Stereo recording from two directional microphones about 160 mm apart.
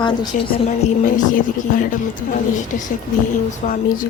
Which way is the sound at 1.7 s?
60° left (ahead or behind).